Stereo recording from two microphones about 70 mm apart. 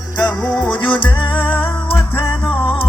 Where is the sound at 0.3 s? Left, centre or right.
Centre.